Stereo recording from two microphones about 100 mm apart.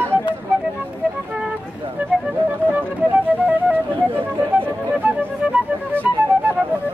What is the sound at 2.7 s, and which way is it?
Music, 15° right (ahead or behind).